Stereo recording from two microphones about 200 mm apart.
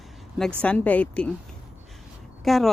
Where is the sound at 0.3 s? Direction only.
5° left (ahead or behind).